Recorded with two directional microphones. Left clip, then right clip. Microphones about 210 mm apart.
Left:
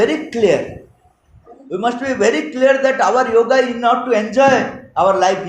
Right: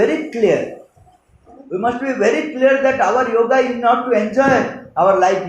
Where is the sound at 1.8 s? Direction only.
35° left (ahead or behind).